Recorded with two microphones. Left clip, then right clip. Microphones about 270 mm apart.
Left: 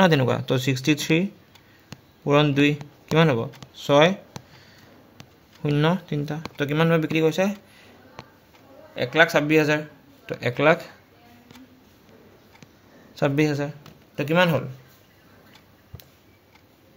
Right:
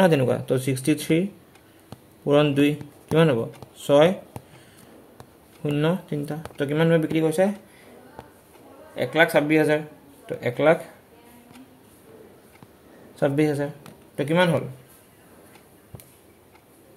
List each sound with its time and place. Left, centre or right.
0.0 s speech: left
2.2 s speech: centre
5.6 s speech: left
8.9 s speech: left
13.1 s speech: left